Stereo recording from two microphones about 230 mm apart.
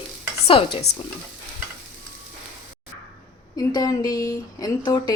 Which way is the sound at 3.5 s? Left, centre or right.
Centre.